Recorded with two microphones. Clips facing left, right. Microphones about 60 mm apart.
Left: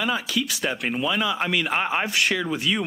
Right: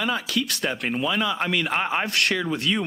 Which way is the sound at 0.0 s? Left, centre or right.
Centre.